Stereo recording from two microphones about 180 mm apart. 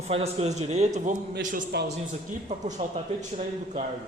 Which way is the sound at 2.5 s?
40° right (ahead or behind).